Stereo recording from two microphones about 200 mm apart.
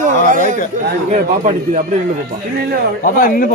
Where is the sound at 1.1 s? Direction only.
35° right (ahead or behind).